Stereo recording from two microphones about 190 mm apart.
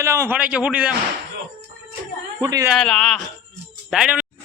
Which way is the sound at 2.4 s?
20° right (ahead or behind).